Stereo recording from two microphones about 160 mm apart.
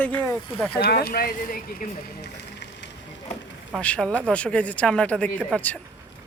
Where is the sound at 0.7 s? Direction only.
70° left (ahead or behind).